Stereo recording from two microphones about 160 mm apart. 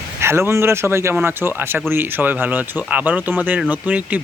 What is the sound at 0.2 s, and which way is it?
Speech, 15° right (ahead or behind).